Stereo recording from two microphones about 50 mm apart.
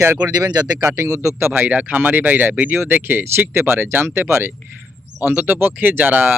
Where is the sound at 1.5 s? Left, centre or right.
Right.